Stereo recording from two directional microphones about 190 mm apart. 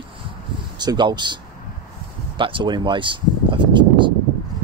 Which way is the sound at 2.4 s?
25° right (ahead or behind).